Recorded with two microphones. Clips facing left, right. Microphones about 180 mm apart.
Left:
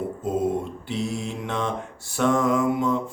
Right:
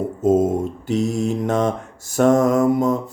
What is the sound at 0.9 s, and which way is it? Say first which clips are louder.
Mantra: right 11 dB; 45° right (ahead or behind).